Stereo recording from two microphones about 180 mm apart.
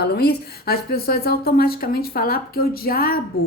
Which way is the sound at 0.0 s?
60° left (ahead or behind).